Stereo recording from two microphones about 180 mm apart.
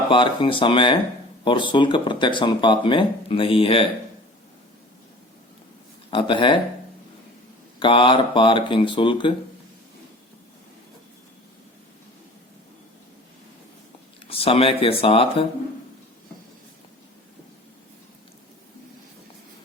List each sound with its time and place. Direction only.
0.1 s speech: 30° left (ahead or behind)
6.1 s speech: 30° left (ahead or behind)
7.8 s speech: 30° left (ahead or behind)
14.3 s speech: 30° left (ahead or behind)